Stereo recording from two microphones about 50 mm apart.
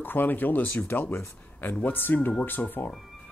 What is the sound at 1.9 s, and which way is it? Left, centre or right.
Speech, left.